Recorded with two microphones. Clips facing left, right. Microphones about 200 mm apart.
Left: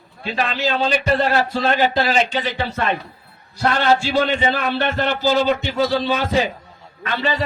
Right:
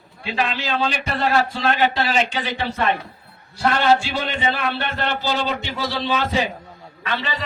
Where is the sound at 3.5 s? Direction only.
40° left (ahead or behind).